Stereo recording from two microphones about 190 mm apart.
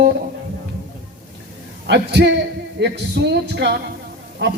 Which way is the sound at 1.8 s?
60° right (ahead or behind).